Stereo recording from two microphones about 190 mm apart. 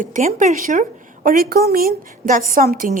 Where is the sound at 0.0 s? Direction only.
40° right (ahead or behind).